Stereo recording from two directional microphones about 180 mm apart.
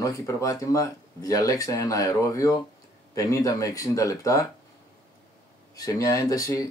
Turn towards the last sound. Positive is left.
turn(degrees=20)  # may be behind; listen again after turning